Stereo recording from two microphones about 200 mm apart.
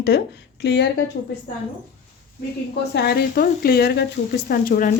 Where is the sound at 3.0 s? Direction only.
50° left (ahead or behind).